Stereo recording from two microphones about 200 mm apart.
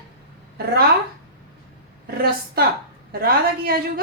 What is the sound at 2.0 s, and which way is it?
Speech, 50° right (ahead or behind).